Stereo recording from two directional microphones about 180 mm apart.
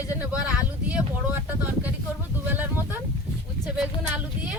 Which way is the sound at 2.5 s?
10° right (ahead or behind).